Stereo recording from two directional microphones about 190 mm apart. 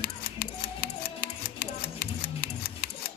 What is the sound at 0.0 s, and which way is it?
Music, 55° left (ahead or behind).